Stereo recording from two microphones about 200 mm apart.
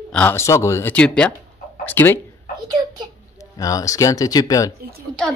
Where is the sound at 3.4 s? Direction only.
15° left (ahead or behind).